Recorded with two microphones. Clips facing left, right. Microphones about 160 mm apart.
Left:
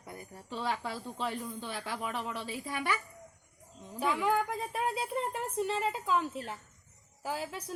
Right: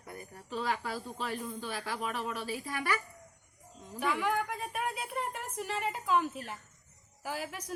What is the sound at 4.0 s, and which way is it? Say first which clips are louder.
Speech: left 2 dB; 25° left (ahead or behind).